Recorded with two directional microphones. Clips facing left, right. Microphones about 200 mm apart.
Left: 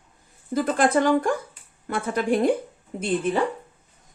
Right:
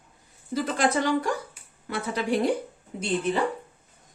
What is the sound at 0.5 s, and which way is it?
A woman's voice, 50° left (ahead or behind).